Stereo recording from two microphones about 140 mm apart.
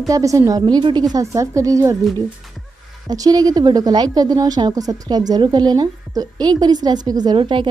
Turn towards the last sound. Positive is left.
turn(degrees=-35)  # may be behind; listen again after turning